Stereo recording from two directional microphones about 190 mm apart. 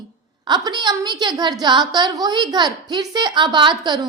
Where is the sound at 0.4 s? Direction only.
20° right (ahead or behind).